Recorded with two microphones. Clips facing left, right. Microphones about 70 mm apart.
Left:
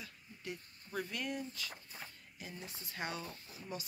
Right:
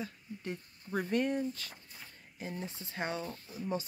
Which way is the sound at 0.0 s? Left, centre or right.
Right.